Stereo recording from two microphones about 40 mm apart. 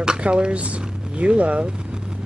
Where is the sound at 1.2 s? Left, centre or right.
Right.